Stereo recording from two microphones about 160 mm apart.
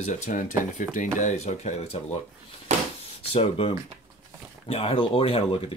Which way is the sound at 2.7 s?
45° right (ahead or behind).